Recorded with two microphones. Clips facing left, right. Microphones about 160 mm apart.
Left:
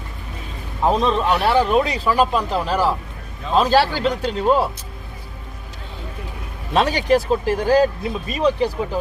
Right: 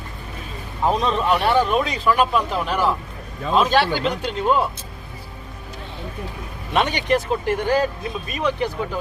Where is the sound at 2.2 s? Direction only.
35° left (ahead or behind).